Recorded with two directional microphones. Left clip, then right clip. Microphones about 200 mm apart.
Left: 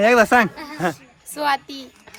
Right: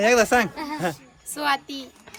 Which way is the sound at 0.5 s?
50° right (ahead or behind).